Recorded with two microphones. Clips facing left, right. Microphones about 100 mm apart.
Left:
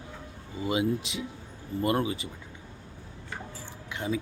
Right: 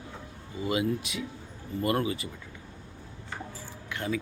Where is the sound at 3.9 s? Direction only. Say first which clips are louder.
Left 1 dB; 20° left (ahead or behind).